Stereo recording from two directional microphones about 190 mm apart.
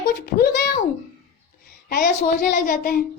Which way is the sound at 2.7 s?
50° left (ahead or behind).